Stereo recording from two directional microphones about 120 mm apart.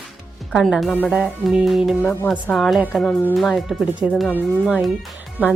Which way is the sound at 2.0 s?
15° left (ahead or behind).